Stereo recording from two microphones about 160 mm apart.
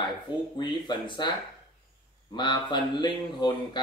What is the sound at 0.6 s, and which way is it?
Speech, 30° left (ahead or behind).